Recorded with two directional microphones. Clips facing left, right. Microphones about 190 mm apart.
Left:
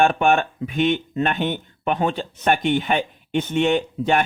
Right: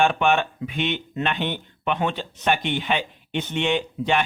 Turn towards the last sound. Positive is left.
turn(degrees=45)  # may be behind; listen again after turning